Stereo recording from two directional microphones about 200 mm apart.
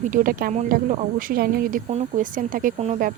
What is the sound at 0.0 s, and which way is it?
Speech, 40° right (ahead or behind).